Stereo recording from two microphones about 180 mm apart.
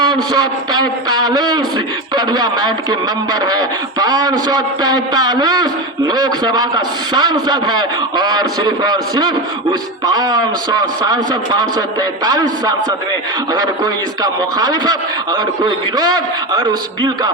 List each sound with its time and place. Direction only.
1.2 s a man's voice: 20° right (ahead or behind)